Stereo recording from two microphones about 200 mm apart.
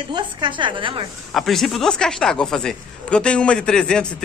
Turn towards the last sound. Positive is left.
turn(degrees=5)  # may be behind; listen again after turning